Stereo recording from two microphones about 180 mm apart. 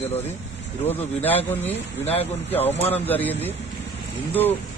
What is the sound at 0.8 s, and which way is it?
Speech, 35° left (ahead or behind).